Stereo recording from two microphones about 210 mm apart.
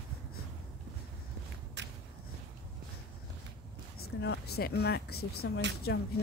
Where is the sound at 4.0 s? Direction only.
55° left (ahead or behind).